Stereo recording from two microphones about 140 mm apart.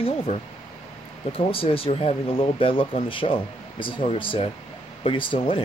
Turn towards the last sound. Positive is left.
turn(degrees=40)  # may be behind; listen again after turning